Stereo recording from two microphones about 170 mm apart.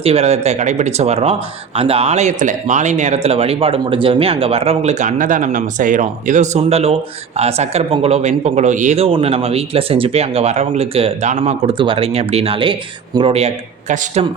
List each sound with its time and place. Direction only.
0.0 s speech: 35° right (ahead or behind)